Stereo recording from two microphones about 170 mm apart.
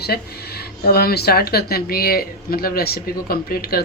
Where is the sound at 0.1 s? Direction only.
65° left (ahead or behind).